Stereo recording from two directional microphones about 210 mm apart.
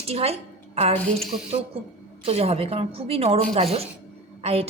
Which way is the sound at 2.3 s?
30° right (ahead or behind).